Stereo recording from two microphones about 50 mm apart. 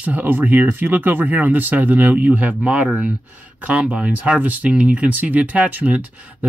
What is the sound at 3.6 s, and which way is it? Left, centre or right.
Speech, right.